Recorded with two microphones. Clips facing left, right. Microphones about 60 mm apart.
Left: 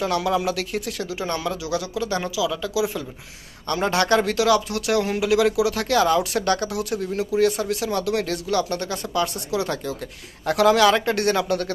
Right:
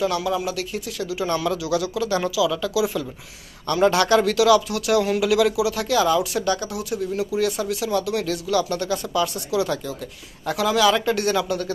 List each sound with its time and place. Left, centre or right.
0.0 s speech: left
1.2 s speech: left
3.6 s speech: left
5.6 s speech: left
10.4 s speech: left